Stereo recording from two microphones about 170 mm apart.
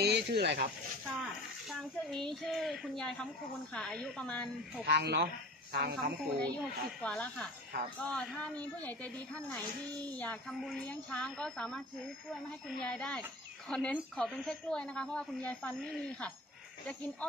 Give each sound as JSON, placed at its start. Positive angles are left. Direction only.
{"t": 0.0, "sound": "speech", "side_deg": -75}
{"t": 1.7, "sound": "a woman's voice", "side_deg": 0}
{"t": 4.8, "sound": "speech", "side_deg": -80}
{"t": 6.6, "sound": "a woman's voice", "side_deg": 5}
{"t": 12.8, "sound": "a woman's voice", "side_deg": 5}